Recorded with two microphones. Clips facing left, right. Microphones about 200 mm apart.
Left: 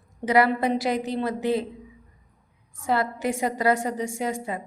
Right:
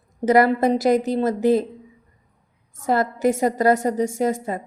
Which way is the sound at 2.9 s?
45° right (ahead or behind).